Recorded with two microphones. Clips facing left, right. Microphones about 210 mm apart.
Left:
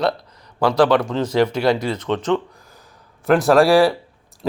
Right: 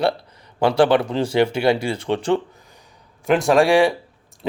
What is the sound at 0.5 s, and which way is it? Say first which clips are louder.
Speech: even; 25° right (ahead or behind).